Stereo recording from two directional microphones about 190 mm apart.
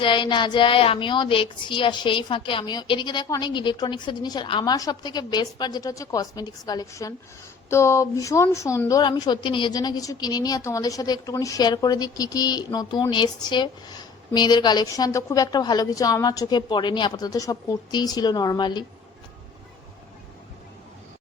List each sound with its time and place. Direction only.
0.0 s a woman's voice: 25° left (ahead or behind)